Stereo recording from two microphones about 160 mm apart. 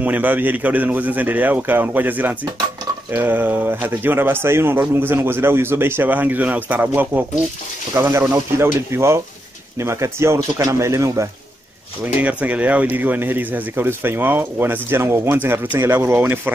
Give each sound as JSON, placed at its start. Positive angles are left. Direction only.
{"t": 0.0, "sound": "speech", "side_deg": -10}